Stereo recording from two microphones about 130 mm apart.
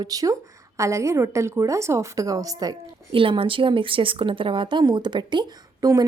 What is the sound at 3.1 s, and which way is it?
A woman's voice, 45° right (ahead or behind).